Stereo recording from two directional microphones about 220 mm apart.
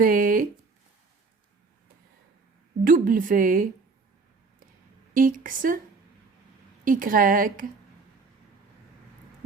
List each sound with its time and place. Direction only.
0.0 s a sound: 40° right (ahead or behind)
2.8 s a woman's voice: 40° right (ahead or behind)
5.1 s a woman's voice: 40° right (ahead or behind)
6.8 s a woman's voice: 40° right (ahead or behind)